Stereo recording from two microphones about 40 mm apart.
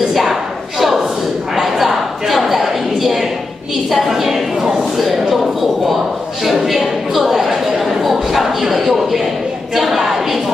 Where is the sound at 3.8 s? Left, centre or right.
Centre.